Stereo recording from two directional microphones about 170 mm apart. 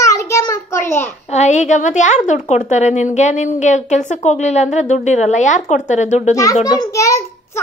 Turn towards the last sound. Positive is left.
turn(degrees=20)  # may be behind; listen again after turning